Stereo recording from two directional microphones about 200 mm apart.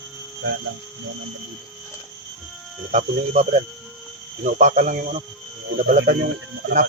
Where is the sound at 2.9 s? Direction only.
35° right (ahead or behind).